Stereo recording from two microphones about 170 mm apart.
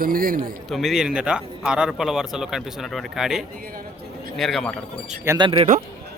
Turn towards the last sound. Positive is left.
turn(degrees=-30)  # may be behind; listen again after turning